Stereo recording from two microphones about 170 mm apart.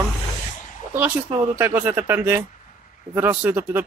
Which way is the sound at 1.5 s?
10° right (ahead or behind).